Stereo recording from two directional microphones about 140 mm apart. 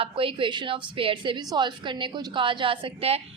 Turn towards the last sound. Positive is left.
turn(degrees=-40)  # may be behind; listen again after turning